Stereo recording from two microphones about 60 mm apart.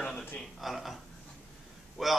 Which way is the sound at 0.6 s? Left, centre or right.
Centre.